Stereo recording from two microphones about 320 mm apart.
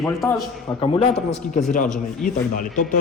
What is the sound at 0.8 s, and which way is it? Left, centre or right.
Speech, centre.